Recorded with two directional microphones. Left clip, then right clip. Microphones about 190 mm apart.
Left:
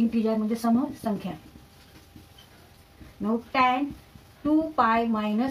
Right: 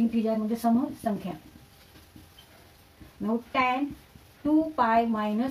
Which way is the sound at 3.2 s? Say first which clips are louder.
Left 3 dB; 5° right (ahead or behind).